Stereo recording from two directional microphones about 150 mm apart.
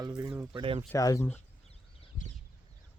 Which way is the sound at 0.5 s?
35° right (ahead or behind).